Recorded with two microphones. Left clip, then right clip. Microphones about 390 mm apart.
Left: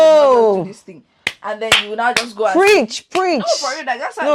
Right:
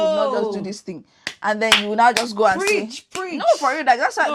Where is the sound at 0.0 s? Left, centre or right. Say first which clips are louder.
Left 10 dB; left.